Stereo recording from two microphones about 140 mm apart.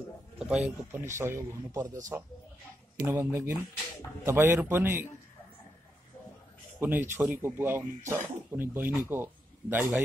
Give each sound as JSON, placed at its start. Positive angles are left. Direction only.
{"t": 0.4, "sound": "speech", "side_deg": -5}
{"t": 6.8, "sound": "a man's voice", "side_deg": -15}